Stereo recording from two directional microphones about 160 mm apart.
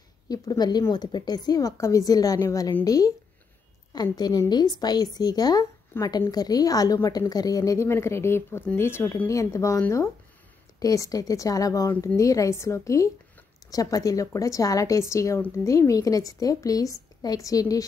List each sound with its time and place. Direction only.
0.3 s a woman's voice: 25° left (ahead or behind)